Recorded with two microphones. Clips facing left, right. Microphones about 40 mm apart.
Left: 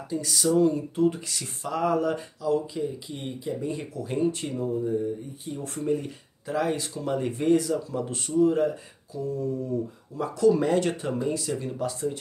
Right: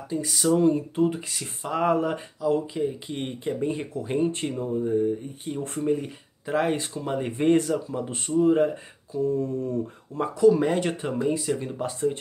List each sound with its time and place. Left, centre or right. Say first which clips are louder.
0.1 s speech: right 1 dB; centre
1.1 s speech: right 2 dB; centre
1.7 s speech: right 1 dB; right
3.2 s speech: right 4 dB; right
5.4 s speech: right 3 dB; right
5.9 s speech: even; centre
6.5 s speech: right 2 dB; right
6.9 s speech: even; centre
7.4 s speech: right 2 dB; right
7.9 s speech: right 1 dB; centre; by 9.7 s right
10.4 s speech: right 2 dB; centre